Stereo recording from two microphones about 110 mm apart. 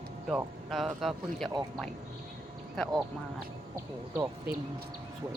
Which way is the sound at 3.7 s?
25° right (ahead or behind).